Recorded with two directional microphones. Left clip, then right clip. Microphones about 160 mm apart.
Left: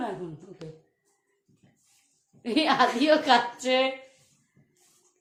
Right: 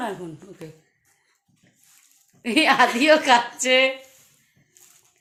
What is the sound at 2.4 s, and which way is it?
A woman's voice, 50° right (ahead or behind).